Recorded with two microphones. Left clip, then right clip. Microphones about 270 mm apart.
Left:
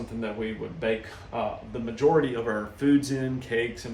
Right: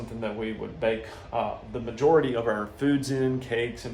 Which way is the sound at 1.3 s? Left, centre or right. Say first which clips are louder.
Right 1 dB; centre.